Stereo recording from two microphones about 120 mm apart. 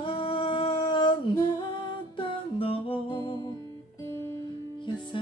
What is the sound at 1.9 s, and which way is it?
Music, 45° left (ahead or behind).